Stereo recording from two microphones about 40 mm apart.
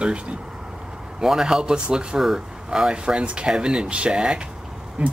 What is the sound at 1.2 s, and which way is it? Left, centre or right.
Speech, centre.